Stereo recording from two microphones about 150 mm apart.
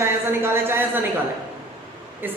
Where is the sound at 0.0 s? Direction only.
15° right (ahead or behind).